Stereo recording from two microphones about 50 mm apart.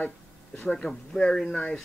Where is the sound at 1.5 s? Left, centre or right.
Left.